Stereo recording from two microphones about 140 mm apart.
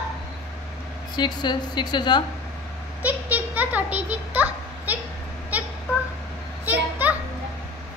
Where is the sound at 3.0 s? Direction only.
10° right (ahead or behind).